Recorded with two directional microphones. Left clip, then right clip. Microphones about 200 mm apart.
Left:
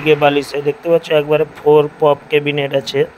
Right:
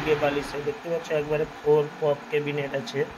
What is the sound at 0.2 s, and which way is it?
Speech, 45° left (ahead or behind).